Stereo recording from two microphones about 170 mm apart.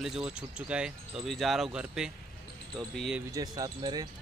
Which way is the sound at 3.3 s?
20° right (ahead or behind).